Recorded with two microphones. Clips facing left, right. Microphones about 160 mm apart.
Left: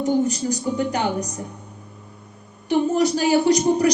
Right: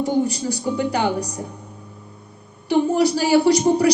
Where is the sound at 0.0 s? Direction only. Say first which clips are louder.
Even; 35° right (ahead or behind).